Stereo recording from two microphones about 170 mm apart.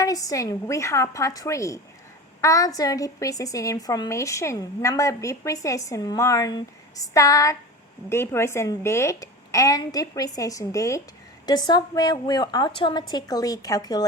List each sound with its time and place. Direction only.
0.0 s a woman's voice: 20° left (ahead or behind)